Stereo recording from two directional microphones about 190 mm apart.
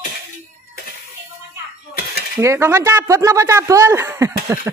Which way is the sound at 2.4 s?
15° right (ahead or behind).